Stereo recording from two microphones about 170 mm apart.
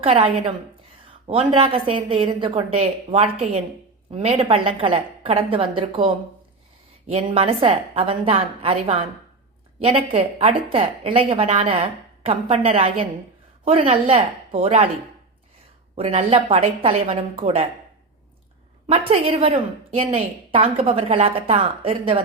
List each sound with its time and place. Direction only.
0.0 s a woman's voice: 35° right (ahead or behind)
10.1 s a woman's voice: 35° right (ahead or behind)
16.0 s a woman's voice: 35° right (ahead or behind)
18.9 s a woman's voice: 35° right (ahead or behind)